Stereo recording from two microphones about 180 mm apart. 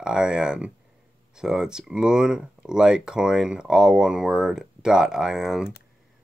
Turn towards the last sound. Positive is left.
turn(degrees=-5)  # may be behind; listen again after turning